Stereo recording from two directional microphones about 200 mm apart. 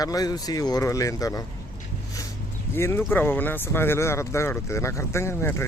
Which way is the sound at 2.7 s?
15° left (ahead or behind).